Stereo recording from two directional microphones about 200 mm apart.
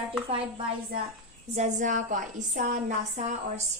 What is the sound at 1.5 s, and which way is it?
A woman's voice, 35° right (ahead or behind).